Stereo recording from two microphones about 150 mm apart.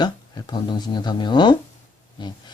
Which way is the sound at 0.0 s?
30° left (ahead or behind).